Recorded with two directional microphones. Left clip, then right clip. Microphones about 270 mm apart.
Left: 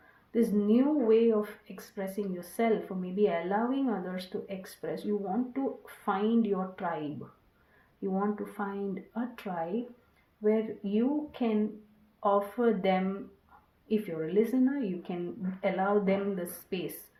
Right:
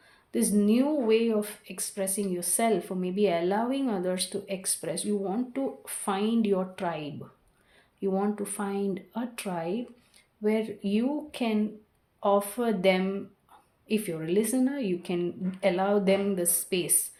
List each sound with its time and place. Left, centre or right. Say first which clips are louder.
0.3 s speech: right 1 dB; right
8.1 s speech: right 1 dB; right